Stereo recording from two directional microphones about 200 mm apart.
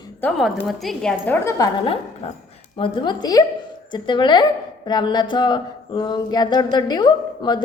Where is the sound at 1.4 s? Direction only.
15° left (ahead or behind).